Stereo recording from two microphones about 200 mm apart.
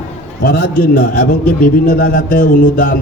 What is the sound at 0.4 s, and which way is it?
A man's voice, 50° left (ahead or behind).